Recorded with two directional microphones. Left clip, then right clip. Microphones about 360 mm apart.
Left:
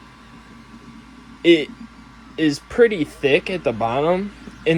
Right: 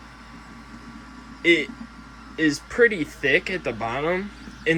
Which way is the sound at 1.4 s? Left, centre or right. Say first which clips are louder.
Left 4 dB; centre.